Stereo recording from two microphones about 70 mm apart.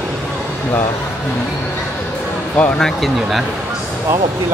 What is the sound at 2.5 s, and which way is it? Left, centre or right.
Speech, centre.